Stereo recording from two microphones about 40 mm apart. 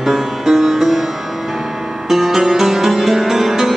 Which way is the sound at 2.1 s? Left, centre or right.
Centre.